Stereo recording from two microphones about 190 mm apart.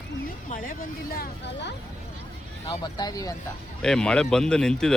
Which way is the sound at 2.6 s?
20° left (ahead or behind).